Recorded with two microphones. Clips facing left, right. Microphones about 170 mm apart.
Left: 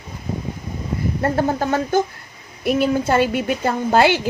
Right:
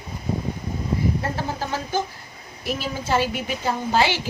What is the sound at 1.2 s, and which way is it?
A woman's voice, 55° left (ahead or behind).